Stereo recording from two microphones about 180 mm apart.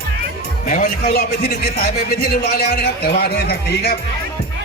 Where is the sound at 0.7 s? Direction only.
40° left (ahead or behind).